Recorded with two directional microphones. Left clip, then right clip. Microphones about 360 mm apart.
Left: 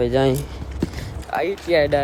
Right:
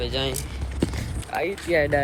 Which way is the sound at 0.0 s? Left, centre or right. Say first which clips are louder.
Left 8 dB; left.